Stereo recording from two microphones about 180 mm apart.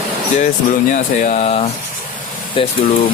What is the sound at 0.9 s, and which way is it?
Speech, 45° left (ahead or behind).